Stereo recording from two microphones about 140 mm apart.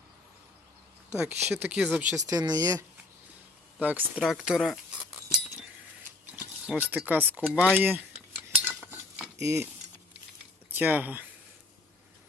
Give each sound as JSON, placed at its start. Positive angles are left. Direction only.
{"t": 1.1, "sound": "speech", "side_deg": -15}
{"t": 2.1, "sound": "speech", "side_deg": -25}
{"t": 3.8, "sound": "speech", "side_deg": -10}
{"t": 6.3, "sound": "speech", "side_deg": -10}
{"t": 8.9, "sound": "cutlery", "side_deg": -5}
{"t": 9.4, "sound": "speech", "side_deg": -20}
{"t": 10.7, "sound": "speech", "side_deg": -10}